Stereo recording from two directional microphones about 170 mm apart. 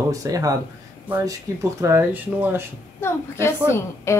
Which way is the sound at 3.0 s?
15° left (ahead or behind).